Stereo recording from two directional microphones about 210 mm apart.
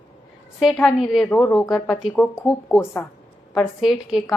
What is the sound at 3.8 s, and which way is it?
Speech, centre (ahead or behind).